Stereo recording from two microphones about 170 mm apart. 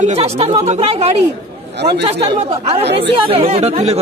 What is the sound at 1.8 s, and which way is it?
Speech, 80° right.